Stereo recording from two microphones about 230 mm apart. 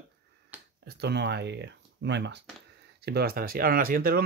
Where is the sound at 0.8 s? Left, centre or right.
Right.